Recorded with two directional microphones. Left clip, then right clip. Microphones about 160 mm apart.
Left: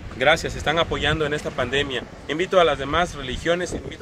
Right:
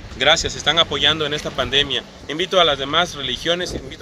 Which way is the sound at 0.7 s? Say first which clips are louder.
Right 5 dB; 10° left (ahead or behind).